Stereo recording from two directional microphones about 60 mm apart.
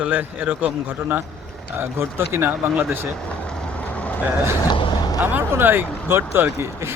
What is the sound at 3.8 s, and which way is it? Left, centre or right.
Vehicle, left.